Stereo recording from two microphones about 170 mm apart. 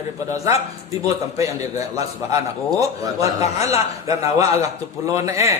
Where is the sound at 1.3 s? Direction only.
20° right (ahead or behind).